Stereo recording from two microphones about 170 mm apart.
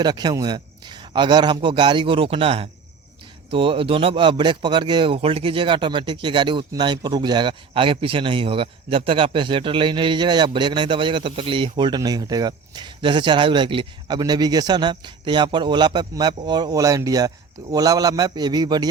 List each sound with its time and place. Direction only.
0.0 s speech: 25° right (ahead or behind)